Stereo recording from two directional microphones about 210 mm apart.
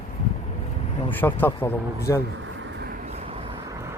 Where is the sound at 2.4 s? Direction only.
65° right (ahead or behind).